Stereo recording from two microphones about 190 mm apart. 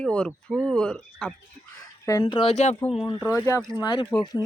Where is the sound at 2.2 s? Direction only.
30° left (ahead or behind).